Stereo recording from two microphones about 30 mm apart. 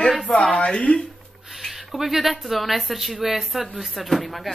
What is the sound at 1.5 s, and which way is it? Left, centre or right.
Speech, centre.